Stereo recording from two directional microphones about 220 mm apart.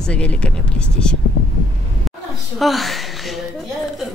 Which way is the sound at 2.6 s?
Centre (ahead or behind).